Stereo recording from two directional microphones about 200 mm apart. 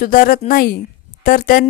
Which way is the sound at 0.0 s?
45° left (ahead or behind).